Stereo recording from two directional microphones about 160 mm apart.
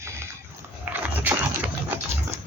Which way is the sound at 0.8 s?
10° right (ahead or behind).